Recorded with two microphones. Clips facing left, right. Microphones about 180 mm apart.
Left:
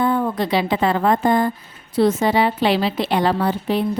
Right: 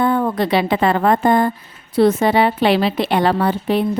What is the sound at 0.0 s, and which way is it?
A woman's voice, 60° right (ahead or behind).